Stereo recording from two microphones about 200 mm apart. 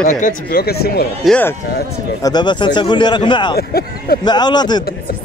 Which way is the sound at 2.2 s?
20° left (ahead or behind).